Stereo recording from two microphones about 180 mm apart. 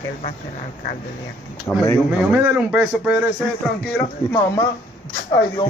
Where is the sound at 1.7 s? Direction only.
10° left (ahead or behind).